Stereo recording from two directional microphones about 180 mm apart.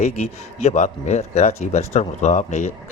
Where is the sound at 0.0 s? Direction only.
35° left (ahead or behind).